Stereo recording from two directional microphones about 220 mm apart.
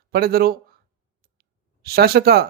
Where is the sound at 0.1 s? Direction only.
45° right (ahead or behind).